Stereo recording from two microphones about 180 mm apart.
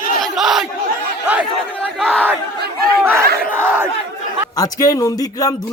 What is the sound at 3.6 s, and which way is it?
Battle cry, 10° right (ahead or behind).